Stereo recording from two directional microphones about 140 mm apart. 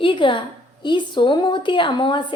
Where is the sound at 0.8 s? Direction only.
35° left (ahead or behind).